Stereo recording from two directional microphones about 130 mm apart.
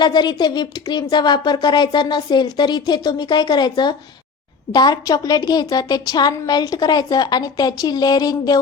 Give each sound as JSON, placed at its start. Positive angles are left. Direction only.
{"t": 0.0, "sound": "speech", "side_deg": 35}